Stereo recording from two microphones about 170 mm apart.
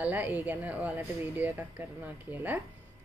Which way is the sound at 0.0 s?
10° right (ahead or behind).